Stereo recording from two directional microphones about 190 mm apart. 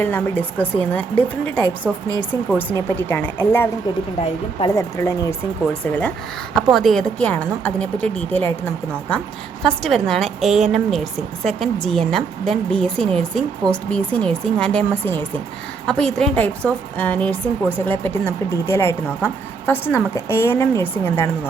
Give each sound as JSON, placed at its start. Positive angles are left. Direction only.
{"t": 0.0, "sound": "speech", "side_deg": 10}
{"t": 9.6, "sound": "a woman's voice", "side_deg": 0}